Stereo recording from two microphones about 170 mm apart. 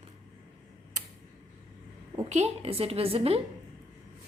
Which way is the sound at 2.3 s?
40° right (ahead or behind).